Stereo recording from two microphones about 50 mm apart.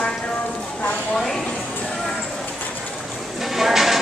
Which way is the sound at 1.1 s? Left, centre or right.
Centre.